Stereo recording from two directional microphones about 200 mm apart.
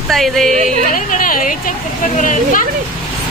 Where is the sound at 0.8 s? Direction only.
40° left (ahead or behind).